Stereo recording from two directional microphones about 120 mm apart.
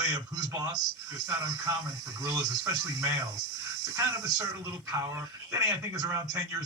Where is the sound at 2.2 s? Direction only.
30° right (ahead or behind).